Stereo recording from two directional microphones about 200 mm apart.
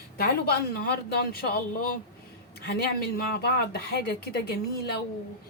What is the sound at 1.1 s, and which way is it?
A woman's voice, 50° left (ahead or behind).